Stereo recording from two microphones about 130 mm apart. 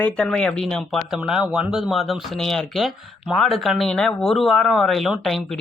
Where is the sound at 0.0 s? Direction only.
5° left (ahead or behind).